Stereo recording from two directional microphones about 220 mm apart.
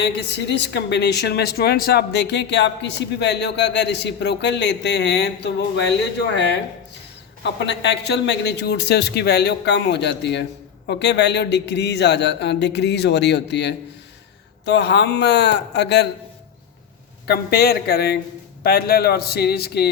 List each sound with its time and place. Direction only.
0.0 s speech: 50° left (ahead or behind)
7.4 s speech: 50° left (ahead or behind)
17.2 s speech: 45° left (ahead or behind)